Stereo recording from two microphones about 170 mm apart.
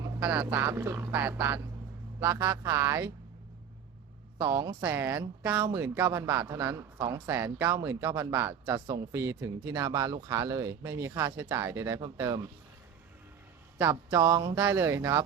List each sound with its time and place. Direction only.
0.2 s speech: 10° right (ahead or behind)
4.4 s speech: 20° right (ahead or behind)
12.1 s music: 20° right (ahead or behind)
13.7 s music: 15° right (ahead or behind)
14.5 s speech: 15° right (ahead or behind)